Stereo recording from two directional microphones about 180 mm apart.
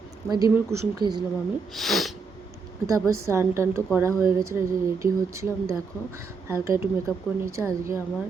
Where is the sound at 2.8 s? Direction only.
15° right (ahead or behind).